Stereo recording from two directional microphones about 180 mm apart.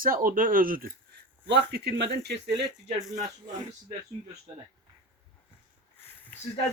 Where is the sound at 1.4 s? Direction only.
70° right (ahead or behind).